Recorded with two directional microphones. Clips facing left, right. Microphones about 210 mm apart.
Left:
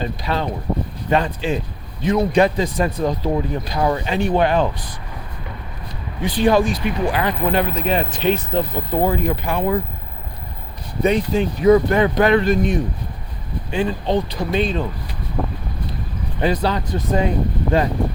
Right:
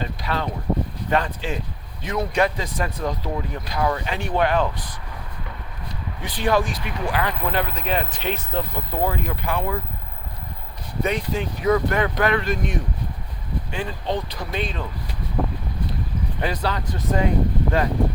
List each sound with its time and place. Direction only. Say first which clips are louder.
0.0 s speech: left 4 dB; 25° left (ahead or behind)
6.2 s speech: left 6 dB; 30° left (ahead or behind)
11.0 s speech: left 7 dB; 30° left (ahead or behind)
16.6 s speech: left 5 dB; 25° left (ahead or behind)